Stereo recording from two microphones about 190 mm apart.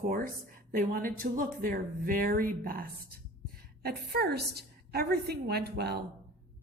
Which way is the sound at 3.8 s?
55° right (ahead or behind).